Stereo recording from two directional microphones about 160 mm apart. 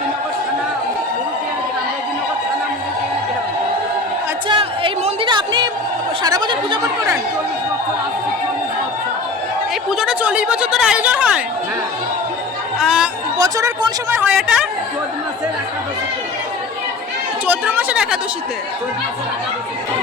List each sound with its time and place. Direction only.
4.4 s music: 30° right (ahead or behind)
6.2 s speech: 25° right (ahead or behind)
9.9 s speech: 5° right (ahead or behind)
12.8 s chatter: centre (ahead or behind)
13.4 s a woman's voice: 20° right (ahead or behind); by 14.7 s 5° right (ahead or behind)
17.4 s a woman's voice: 10° right (ahead or behind)